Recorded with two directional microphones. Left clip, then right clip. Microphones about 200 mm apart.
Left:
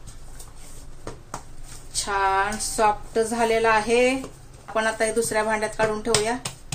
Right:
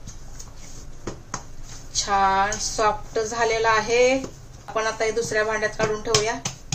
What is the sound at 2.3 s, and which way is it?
Speech, 40° left (ahead or behind).